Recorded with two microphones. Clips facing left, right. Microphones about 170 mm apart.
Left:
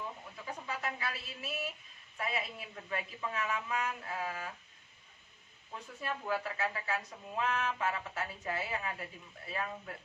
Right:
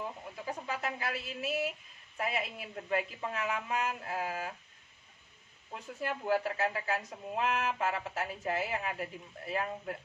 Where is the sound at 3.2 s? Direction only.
30° right (ahead or behind).